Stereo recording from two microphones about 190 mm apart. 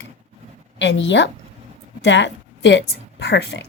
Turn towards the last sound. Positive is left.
turn(degrees=65)  # may be behind; listen again after turning